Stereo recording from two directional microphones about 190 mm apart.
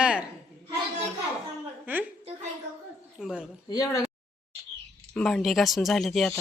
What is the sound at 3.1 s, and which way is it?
Speech, centre (ahead or behind).